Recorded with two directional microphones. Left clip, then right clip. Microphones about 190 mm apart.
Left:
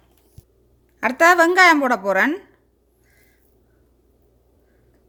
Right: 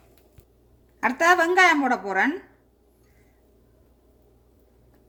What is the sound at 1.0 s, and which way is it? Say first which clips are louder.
A woman's voice: left 5 dB; 45° left (ahead or behind).